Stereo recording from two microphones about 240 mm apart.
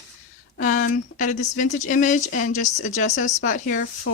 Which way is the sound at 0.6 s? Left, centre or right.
Left.